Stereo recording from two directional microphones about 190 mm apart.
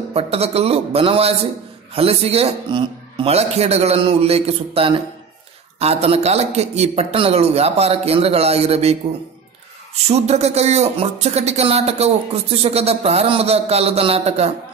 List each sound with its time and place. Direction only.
0.1 s speech: 30° right (ahead or behind)
10.0 s speech: 35° right (ahead or behind)